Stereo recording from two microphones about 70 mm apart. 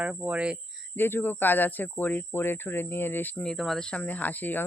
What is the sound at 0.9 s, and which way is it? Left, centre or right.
Speech, left.